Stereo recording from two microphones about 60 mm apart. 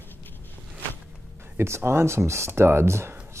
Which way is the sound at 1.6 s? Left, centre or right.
Right.